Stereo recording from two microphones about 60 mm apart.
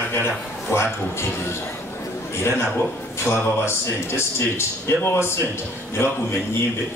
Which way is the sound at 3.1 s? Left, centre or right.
Left.